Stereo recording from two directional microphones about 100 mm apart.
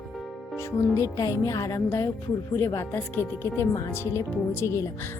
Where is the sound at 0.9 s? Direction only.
35° left (ahead or behind).